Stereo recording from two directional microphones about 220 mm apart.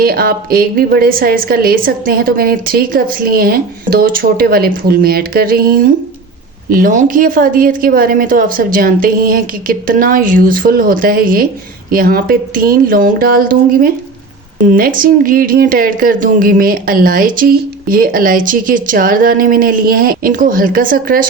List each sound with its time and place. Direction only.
0.0 s a woman's voice: 45° right (ahead or behind)